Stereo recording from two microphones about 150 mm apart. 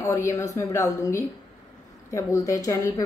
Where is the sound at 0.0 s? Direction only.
20° left (ahead or behind).